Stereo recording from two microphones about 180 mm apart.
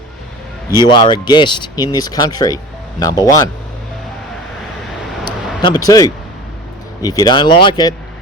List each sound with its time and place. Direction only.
0.7 s speech: 25° left (ahead or behind)
5.6 s speech: 20° left (ahead or behind)